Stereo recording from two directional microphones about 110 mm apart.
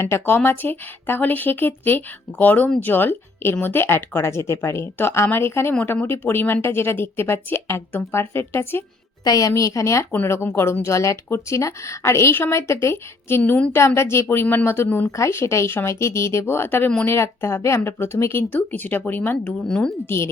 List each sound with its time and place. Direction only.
0.0 s speech: 20° left (ahead or behind)
9.2 s a woman's voice: 35° left (ahead or behind); by 19.5 s 15° left (ahead or behind)
19.6 s speech: 5° left (ahead or behind)
20.1 s speech: 25° left (ahead or behind)